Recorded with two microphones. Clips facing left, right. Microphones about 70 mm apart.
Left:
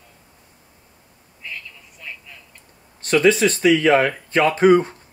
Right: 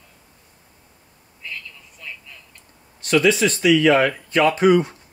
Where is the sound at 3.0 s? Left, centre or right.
Left.